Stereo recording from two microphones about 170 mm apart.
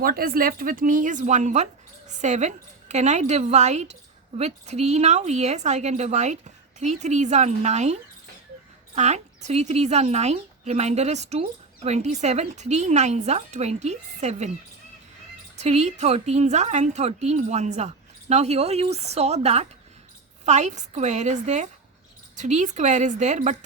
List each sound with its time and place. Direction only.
0.0 s speech: 60° right (ahead or behind); by 7.9 s 40° right (ahead or behind)
9.0 s speech: 40° right (ahead or behind)
15.5 s speech: 40° right (ahead or behind)